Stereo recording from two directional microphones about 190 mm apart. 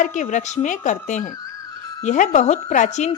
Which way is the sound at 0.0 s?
40° left (ahead or behind).